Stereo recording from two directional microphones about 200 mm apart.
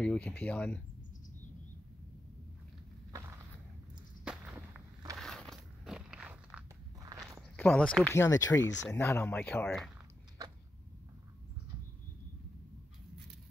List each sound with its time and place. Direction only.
0.0 s speech: 5° left (ahead or behind)
4.6 s walk: 15° right (ahead or behind)
5.1 s biting: centre (ahead or behind)
7.1 s walk: 15° right (ahead or behind)
7.5 s speech: 10° left (ahead or behind)